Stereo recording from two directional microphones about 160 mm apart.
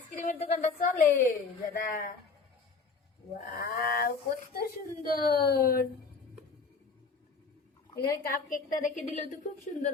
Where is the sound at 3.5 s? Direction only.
65° left (ahead or behind).